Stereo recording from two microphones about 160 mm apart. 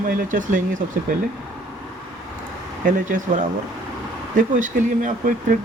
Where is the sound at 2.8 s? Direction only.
55° right (ahead or behind).